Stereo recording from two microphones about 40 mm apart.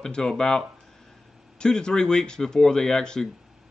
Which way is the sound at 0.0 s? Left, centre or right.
Centre.